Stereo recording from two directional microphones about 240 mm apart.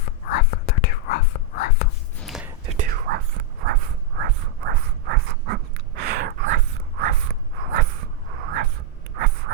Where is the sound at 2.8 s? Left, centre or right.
Right.